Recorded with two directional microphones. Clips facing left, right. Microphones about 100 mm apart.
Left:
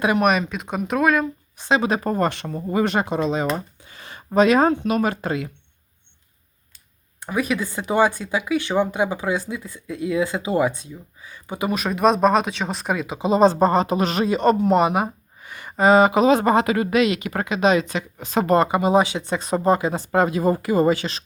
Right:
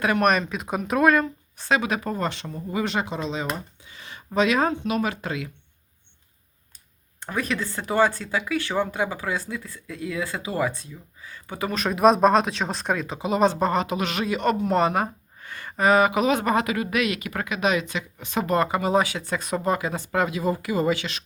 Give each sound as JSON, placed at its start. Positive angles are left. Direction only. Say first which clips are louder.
{"t": 0.2, "sound": "speech", "louder": "left 2 dB", "side_deg": 5}
{"t": 1.5, "sound": "speech", "louder": "left 3 dB", "side_deg": 20}
{"t": 1.8, "sound": "speech", "louder": "left 5 dB", "side_deg": 35}
{"t": 2.1, "sound": "speech", "louder": "left 6 dB", "side_deg": 55}
{"t": 7.2, "sound": "speech", "louder": "left 4 dB", "side_deg": 10}
{"t": 11.9, "sound": "speech", "louder": "even", "side_deg": 0}
{"t": 13.1, "sound": "speech", "louder": "left 6 dB", "side_deg": 25}
{"t": 14.7, "sound": "a sound", "louder": "left 3 dB", "side_deg": 15}
{"t": 15.7, "sound": "speech", "louder": "left 4 dB", "side_deg": 25}
{"t": 18.6, "sound": "speech", "louder": "left 4 dB", "side_deg": 20}